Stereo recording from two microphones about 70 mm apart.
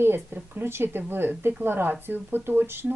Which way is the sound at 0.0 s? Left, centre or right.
Right.